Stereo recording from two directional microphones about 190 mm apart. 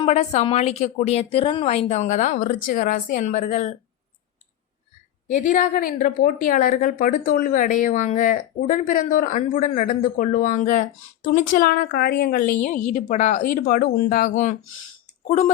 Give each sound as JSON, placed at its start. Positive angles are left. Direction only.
{"t": 0.0, "sound": "speech", "side_deg": 35}
{"t": 5.3, "sound": "a woman's voice", "side_deg": 45}